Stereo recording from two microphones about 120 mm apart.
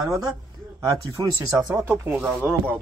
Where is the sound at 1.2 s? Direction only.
35° right (ahead or behind).